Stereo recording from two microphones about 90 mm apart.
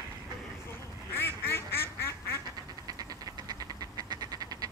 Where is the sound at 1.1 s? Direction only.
25° left (ahead or behind).